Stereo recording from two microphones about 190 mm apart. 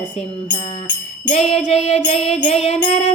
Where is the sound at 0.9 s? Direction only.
40° left (ahead or behind).